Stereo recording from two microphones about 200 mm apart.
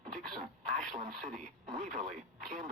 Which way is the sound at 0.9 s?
35° right (ahead or behind).